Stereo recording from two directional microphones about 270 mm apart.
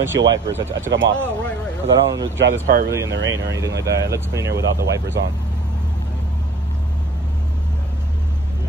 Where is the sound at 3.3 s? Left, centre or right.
Centre.